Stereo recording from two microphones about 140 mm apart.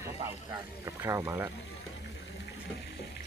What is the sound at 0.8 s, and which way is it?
Speech, 20° right (ahead or behind).